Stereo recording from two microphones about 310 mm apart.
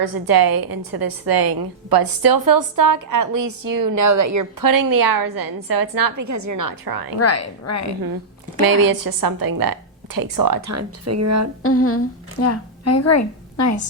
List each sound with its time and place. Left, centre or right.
0.0 s a woman's voice: right
7.2 s a woman's voice: left
8.6 s a woman's voice: right
10.8 s speech: right
11.6 s a woman's voice: left